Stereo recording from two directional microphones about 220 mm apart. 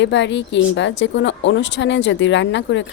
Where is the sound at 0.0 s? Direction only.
55° left (ahead or behind).